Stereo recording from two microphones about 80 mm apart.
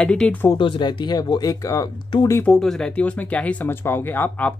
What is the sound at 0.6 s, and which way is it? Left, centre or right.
Speech, left.